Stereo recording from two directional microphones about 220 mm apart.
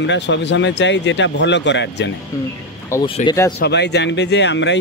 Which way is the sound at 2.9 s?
10° left (ahead or behind).